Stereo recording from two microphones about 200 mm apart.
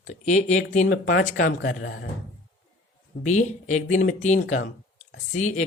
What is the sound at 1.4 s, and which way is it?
Speech, 60° left (ahead or behind).